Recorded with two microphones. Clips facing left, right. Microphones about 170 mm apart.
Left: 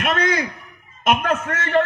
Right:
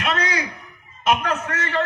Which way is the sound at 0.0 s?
50° left (ahead or behind).